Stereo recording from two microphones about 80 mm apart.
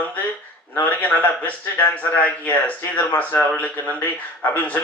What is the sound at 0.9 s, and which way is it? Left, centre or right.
Speech, centre.